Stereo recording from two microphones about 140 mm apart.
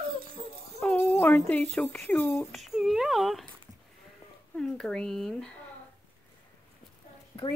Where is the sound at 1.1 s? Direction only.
15° left (ahead or behind).